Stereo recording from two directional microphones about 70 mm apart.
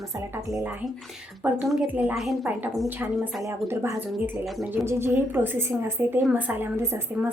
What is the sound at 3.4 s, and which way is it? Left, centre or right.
A woman's voice, right.